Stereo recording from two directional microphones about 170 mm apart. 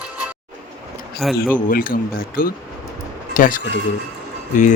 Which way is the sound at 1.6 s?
55° left (ahead or behind).